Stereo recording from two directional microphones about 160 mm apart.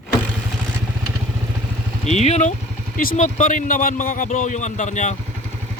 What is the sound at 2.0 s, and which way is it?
Speech, 45° left (ahead or behind).